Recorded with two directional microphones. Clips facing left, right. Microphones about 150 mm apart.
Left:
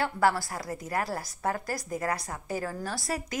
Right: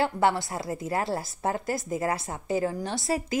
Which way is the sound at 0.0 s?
25° right (ahead or behind).